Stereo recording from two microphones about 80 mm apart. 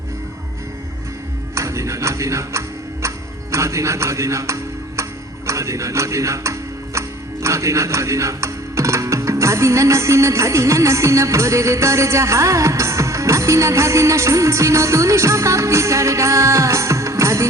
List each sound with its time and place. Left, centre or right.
1.5 s tick-tock: right
3.5 s speech: right
5.5 s music: right
7.4 s speech: right